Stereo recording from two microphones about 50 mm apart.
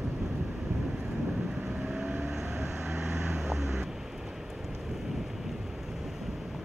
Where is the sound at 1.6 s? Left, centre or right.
Centre.